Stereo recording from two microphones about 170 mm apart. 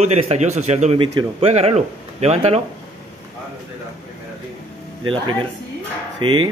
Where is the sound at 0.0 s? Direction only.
40° right (ahead or behind).